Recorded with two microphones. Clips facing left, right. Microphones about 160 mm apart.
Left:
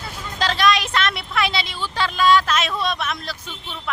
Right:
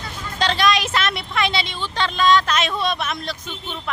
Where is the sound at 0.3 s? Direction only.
Centre (ahead or behind).